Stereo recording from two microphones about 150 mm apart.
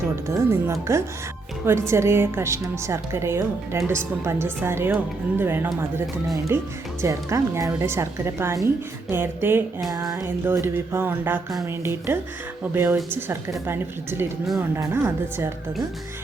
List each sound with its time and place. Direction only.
0.3 s speech: 20° right (ahead or behind)